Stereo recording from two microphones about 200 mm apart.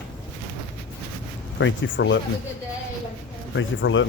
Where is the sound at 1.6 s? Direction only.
70° left (ahead or behind).